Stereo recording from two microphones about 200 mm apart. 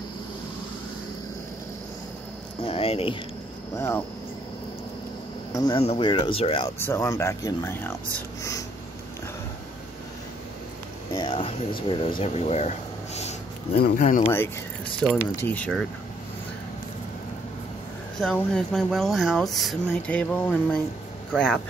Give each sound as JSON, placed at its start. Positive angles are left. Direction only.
{"t": 2.6, "sound": "a sound", "side_deg": 30}
{"t": 3.7, "sound": "speech", "side_deg": 15}
{"t": 5.5, "sound": "speech", "side_deg": 20}
{"t": 6.8, "sound": "speech", "side_deg": 10}
{"t": 11.1, "sound": "speech", "side_deg": 25}
{"t": 13.7, "sound": "speech", "side_deg": 50}
{"t": 14.2, "sound": "speech", "side_deg": 10}
{"t": 18.2, "sound": "speech", "side_deg": 5}